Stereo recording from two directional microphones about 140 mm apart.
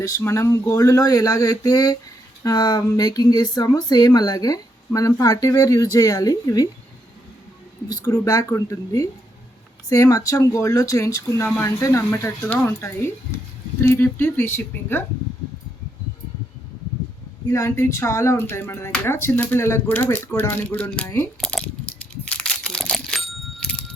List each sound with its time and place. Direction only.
0.0 s speech: 20° left (ahead or behind)
7.9 s speech: 25° left (ahead or behind)
17.5 s speech: 20° left (ahead or behind)
21.4 s a sound: 5° left (ahead or behind)